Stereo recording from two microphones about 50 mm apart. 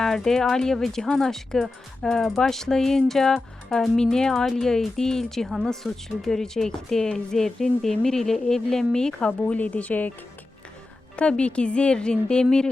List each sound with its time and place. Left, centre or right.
0.0 s speech: centre
9.6 s speech: left
11.2 s speech: left